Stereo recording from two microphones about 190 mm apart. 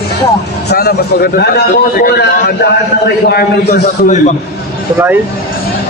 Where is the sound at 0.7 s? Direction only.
55° left (ahead or behind).